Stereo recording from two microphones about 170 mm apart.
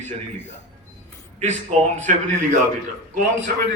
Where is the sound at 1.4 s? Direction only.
40° right (ahead or behind).